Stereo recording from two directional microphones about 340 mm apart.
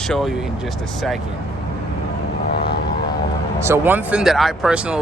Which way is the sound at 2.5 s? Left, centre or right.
Left.